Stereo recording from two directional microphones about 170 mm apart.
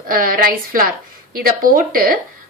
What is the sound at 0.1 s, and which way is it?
A woman's voice, 60° right (ahead or behind).